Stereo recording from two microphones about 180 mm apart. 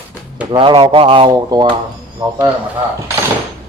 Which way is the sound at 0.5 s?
25° right (ahead or behind).